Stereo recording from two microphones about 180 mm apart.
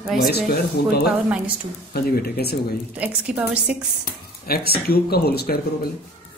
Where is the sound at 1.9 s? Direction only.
60° left (ahead or behind).